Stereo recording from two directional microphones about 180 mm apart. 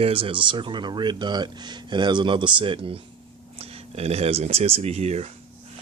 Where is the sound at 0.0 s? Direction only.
30° right (ahead or behind).